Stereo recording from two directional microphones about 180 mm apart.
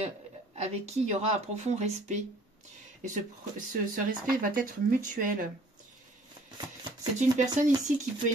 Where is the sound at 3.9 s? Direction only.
50° right (ahead or behind).